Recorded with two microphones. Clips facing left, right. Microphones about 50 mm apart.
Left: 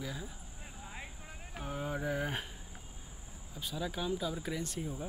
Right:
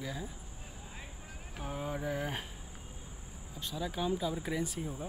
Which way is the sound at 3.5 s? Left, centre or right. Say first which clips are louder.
Right 1 dB; centre.